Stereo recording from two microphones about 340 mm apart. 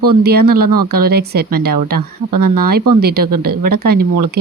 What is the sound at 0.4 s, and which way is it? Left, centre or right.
Speech, right.